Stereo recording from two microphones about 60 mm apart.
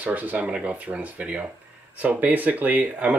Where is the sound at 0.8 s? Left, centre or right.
Right.